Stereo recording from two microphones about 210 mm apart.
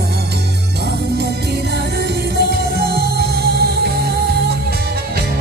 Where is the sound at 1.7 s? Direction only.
50° right (ahead or behind).